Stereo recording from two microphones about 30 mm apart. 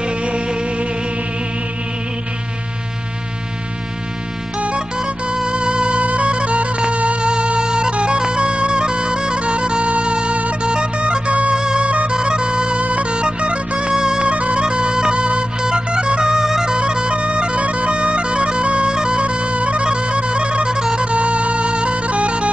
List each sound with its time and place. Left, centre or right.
0.0 s music: right
4.7 s music: right
7.6 s music: right
7.9 s music: right
8.2 s music: right
9.4 s music: right
11.5 s music: right
13.9 s music: right
14.3 s music: right
16.4 s bagpipes: centre
16.8 s bagpipes: right
18.9 s music: right
21.0 s music: right